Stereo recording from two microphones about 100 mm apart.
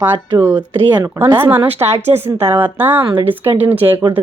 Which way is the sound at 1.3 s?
20° right (ahead or behind).